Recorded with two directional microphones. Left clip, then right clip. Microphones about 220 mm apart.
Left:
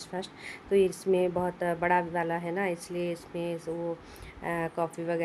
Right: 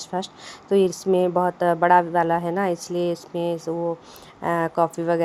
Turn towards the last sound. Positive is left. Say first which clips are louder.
# right 10 dB
turn(degrees=-25)  # may be behind; listen again after turning